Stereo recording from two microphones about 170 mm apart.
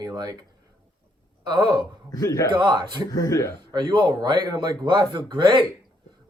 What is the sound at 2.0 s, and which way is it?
Speech, 20° left (ahead or behind).